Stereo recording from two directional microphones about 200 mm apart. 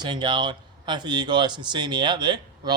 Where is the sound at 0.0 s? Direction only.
25° right (ahead or behind).